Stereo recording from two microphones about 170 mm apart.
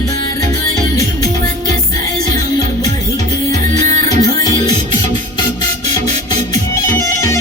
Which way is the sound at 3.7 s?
20° left (ahead or behind).